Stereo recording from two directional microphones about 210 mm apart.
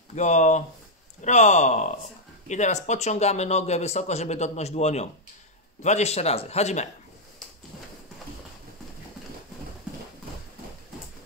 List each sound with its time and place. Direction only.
0.1 s speech: 35° left (ahead or behind)